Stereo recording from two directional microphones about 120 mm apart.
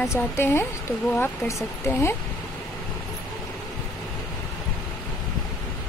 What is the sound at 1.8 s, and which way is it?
Speech, 20° left (ahead or behind).